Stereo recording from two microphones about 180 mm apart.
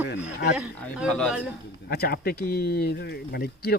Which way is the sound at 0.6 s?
5° left (ahead or behind).